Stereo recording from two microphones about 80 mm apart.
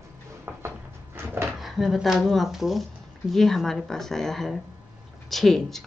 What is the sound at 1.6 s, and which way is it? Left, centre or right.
Speech, centre.